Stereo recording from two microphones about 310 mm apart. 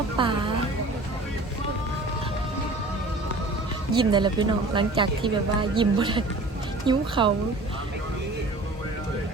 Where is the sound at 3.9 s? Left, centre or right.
Centre.